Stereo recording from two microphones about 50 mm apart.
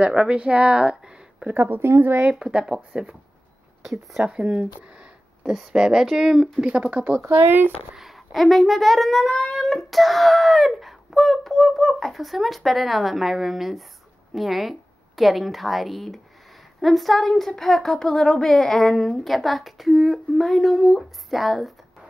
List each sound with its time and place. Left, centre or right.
0.0 s speech: centre
1.5 s speech: right
2.3 s speech: centre
4.2 s speech: right
4.8 s a sound: right
5.5 s speech: centre
6.6 s speech: right
7.2 s speech: right
7.9 s a sound: centre
8.3 s a woman's voice: centre